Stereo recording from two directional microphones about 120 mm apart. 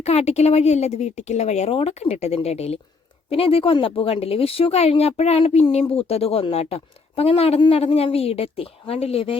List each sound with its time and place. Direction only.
0.0 s a woman's voice: 60° left (ahead or behind)